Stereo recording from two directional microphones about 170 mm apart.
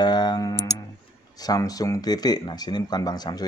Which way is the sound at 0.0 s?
25° left (ahead or behind).